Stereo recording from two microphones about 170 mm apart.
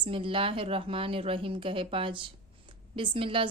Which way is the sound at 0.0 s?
30° right (ahead or behind).